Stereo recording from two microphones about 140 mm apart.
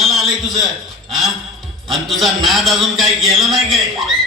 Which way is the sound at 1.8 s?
Centre (ahead or behind).